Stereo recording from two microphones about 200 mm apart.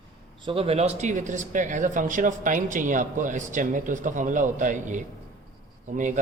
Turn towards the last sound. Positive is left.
turn(degrees=-40)  # may be behind; listen again after turning